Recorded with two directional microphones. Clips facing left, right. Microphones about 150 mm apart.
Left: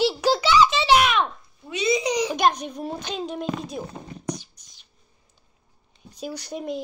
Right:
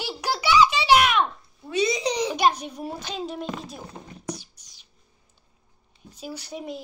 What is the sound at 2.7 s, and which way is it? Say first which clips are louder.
Child singing: left 2 dB; 10° right (ahead or behind).